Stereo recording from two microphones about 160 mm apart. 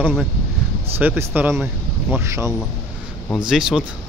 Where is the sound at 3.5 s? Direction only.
Centre (ahead or behind).